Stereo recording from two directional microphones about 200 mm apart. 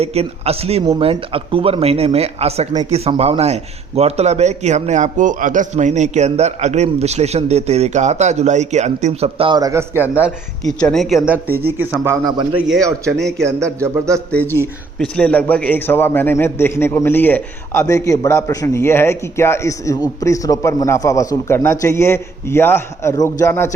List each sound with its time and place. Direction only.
0.0 s speech: 30° right (ahead or behind)
12.5 s speech: centre (ahead or behind)
13.6 s speech: 15° right (ahead or behind)
14.3 s a man's voice: 5° left (ahead or behind)